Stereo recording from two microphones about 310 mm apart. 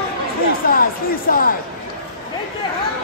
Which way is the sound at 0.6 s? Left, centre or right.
Left.